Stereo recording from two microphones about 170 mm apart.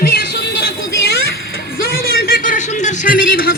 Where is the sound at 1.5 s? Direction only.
60° left (ahead or behind).